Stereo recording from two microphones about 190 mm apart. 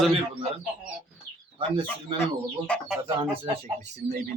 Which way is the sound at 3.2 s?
30° right (ahead or behind).